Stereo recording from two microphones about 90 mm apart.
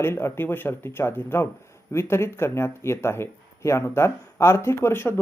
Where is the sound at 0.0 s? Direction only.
30° left (ahead or behind).